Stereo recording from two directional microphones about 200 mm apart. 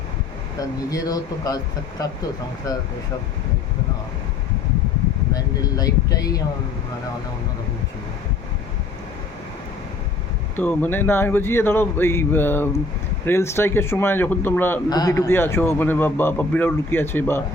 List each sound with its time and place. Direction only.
0.9 s speech: 15° left (ahead or behind)
5.3 s speech: 20° left (ahead or behind)
10.6 s speech: 10° left (ahead or behind)